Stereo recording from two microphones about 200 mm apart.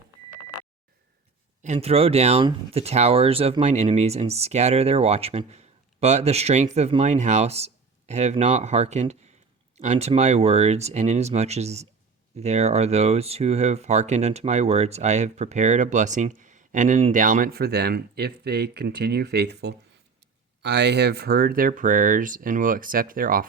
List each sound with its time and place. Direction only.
1.6 s speech: 35° right (ahead or behind)